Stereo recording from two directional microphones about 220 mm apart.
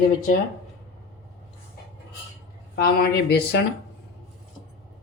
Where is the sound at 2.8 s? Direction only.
45° left (ahead or behind).